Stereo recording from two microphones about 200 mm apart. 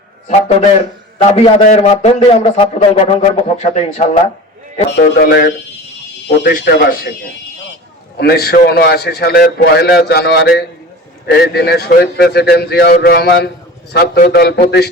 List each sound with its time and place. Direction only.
0.3 s a man's voice: 35° left (ahead or behind)
5.2 s a man's voice: 45° left (ahead or behind)
8.2 s a man's voice: 50° left (ahead or behind)